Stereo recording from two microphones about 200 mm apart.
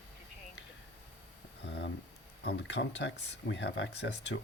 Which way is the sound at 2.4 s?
60° left (ahead or behind).